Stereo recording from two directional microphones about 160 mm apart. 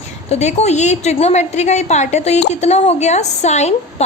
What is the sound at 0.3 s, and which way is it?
A woman's voice, 45° left (ahead or behind).